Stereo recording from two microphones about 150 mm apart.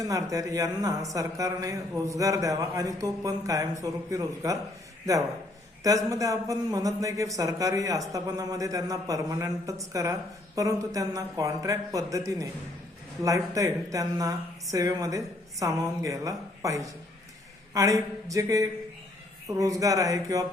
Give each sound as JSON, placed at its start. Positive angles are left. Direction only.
{"t": 0.0, "sound": "a man's voice", "side_deg": -20}
{"t": 5.8, "sound": "a man's voice", "side_deg": -20}